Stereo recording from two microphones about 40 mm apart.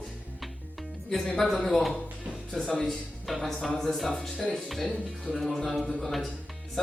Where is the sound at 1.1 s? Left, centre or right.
Centre.